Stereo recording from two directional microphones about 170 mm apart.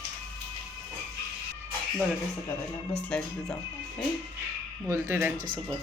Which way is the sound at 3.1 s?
5° left (ahead or behind).